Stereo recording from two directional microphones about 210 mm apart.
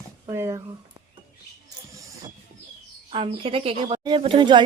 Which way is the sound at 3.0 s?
25° right (ahead or behind).